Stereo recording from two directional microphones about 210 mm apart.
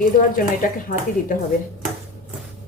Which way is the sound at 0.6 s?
40° left (ahead or behind).